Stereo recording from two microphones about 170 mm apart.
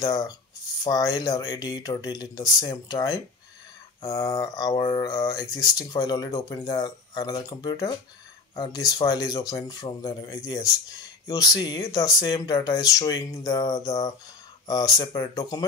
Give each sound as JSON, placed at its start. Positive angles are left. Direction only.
{"t": 0.0, "sound": "speech", "side_deg": 25}